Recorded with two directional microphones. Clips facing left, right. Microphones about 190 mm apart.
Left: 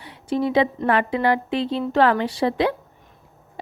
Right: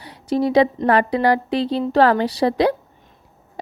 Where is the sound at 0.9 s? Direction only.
40° right (ahead or behind).